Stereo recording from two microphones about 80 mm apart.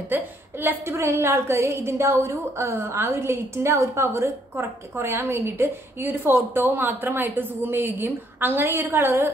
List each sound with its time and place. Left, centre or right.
0.1 s a woman's voice: right